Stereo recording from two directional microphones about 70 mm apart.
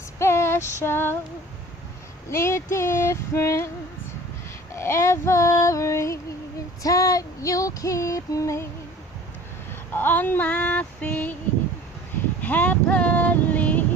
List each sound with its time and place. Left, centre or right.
0.2 s female singing: left
2.3 s female singing: left
4.7 s female singing: left
6.8 s female singing: left
9.9 s female singing: left
12.4 s a sound: left